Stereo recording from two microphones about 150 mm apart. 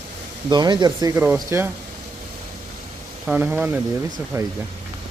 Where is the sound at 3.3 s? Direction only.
10° right (ahead or behind).